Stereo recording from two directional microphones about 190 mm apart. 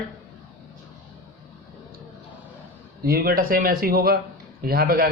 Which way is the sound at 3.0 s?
50° right (ahead or behind).